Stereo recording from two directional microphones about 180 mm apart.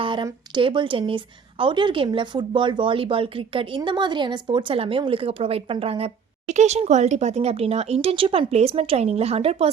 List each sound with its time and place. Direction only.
0.0 s speech: 25° right (ahead or behind)